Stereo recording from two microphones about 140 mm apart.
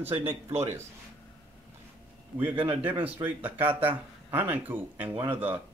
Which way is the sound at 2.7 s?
10° right (ahead or behind).